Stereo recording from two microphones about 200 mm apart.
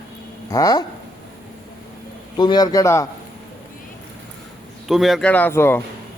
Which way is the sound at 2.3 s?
20° left (ahead or behind).